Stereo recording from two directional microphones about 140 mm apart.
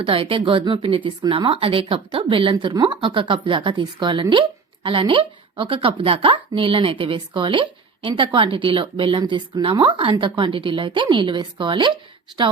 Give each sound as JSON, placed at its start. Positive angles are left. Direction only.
{"t": 0.0, "sound": "speech", "side_deg": -40}